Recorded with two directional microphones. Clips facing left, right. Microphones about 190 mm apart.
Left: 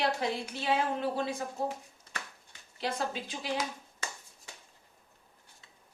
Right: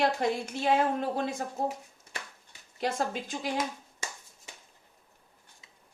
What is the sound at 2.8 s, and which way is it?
Speech, 45° right (ahead or behind).